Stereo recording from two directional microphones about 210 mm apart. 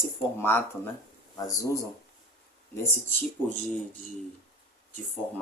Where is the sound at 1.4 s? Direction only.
15° left (ahead or behind).